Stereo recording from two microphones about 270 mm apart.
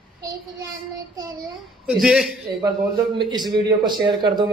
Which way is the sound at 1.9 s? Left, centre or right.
Centre.